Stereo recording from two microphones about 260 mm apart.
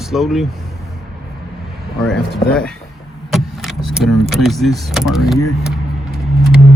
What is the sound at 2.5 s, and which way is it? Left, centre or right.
Speech, centre.